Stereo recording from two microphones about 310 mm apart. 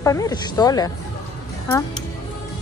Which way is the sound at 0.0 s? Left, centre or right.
Centre.